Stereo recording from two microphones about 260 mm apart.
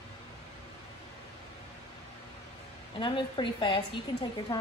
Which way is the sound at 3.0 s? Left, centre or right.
Centre.